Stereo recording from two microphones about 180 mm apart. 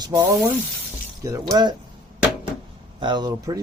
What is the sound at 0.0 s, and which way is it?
Speech, 20° right (ahead or behind).